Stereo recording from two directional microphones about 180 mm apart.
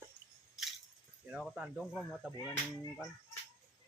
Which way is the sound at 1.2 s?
5° right (ahead or behind).